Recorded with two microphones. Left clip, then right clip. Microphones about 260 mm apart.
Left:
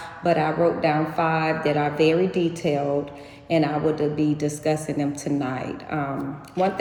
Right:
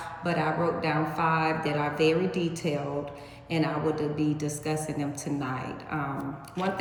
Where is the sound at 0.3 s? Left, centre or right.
Left.